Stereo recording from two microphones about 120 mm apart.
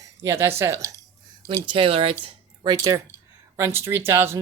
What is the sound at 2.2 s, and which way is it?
Speech, 35° right (ahead or behind).